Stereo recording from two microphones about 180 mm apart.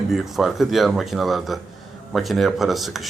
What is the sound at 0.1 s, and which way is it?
A man's voice, centre (ahead or behind).